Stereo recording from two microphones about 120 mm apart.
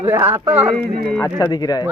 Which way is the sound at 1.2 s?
30° left (ahead or behind).